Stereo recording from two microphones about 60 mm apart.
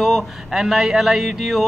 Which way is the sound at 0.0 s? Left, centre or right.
Centre.